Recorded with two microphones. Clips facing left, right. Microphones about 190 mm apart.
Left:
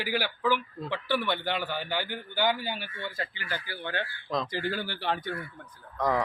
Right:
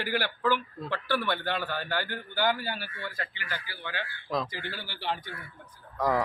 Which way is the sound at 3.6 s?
55° left (ahead or behind).